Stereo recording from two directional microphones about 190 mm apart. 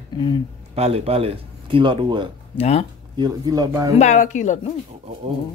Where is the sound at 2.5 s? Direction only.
35° left (ahead or behind).